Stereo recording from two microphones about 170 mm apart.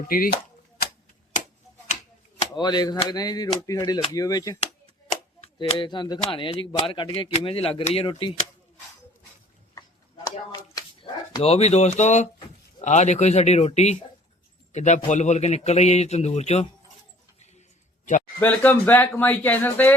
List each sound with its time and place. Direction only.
0.0 s speech: 55° left (ahead or behind)
2.6 s speech: 25° left (ahead or behind)
5.4 s a man's voice: 35° left (ahead or behind)
10.5 s a sound: 25° left (ahead or behind)
11.4 s a man's voice: 35° left (ahead or behind)
18.3 s speech: 10° left (ahead or behind)